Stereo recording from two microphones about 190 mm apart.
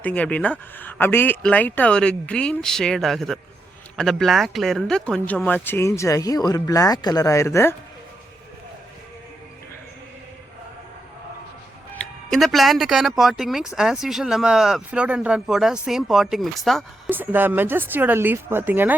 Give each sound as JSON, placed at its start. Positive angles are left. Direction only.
{"t": 0.0, "sound": "speech", "side_deg": 5}
{"t": 12.3, "sound": "speech", "side_deg": 0}
{"t": 17.1, "sound": "speech", "side_deg": -10}